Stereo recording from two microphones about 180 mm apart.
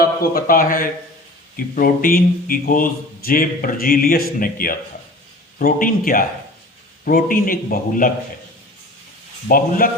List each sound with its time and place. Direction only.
0.0 s a man's voice: 55° left (ahead or behind)
9.5 s a man's voice: 55° left (ahead or behind)